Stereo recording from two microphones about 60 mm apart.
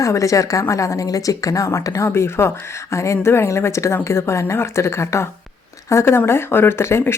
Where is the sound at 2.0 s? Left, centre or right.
Left.